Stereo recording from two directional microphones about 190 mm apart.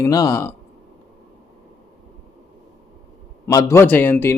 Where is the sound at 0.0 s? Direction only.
20° left (ahead or behind).